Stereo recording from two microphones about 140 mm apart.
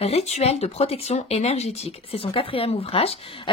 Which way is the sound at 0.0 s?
50° left (ahead or behind).